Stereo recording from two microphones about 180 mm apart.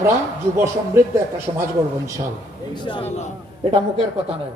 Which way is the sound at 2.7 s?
25° left (ahead or behind).